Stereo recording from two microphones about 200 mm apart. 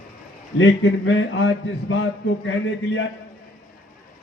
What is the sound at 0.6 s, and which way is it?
A man's voice, 70° left (ahead or behind).